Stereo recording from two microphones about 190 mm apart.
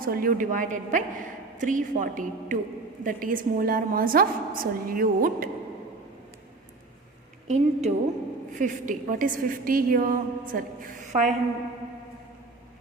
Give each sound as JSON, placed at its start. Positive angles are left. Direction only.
{"t": 0.0, "sound": "a woman's voice", "side_deg": -50}
{"t": 7.4, "sound": "a woman's voice", "side_deg": -35}